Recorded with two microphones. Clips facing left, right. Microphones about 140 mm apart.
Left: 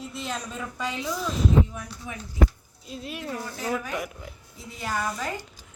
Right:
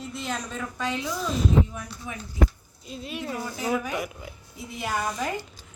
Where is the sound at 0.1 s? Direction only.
Centre (ahead or behind).